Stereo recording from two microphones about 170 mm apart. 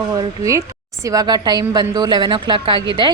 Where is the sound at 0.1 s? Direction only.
20° right (ahead or behind).